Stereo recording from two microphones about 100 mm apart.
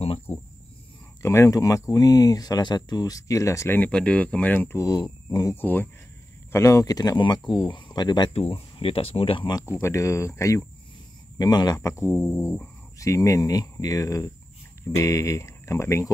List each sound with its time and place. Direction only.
0.3 s cricket: 15° left (ahead or behind)
1.2 s speech: 30° left (ahead or behind)
3.7 s speech: 15° left (ahead or behind)
4.7 s speech: 40° left (ahead or behind)
5.6 s speech: 20° left (ahead or behind)
6.5 s speech: 30° left (ahead or behind); by 8.3 s 45° left (ahead or behind)
8.3 s speech: 75° left (ahead or behind)
9.5 s speech: 35° left (ahead or behind)
11.3 s speech: 40° left (ahead or behind)